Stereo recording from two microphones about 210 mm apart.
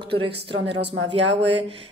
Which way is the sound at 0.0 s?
25° right (ahead or behind).